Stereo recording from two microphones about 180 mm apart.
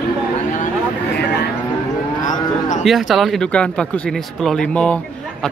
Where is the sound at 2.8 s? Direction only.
Centre (ahead or behind).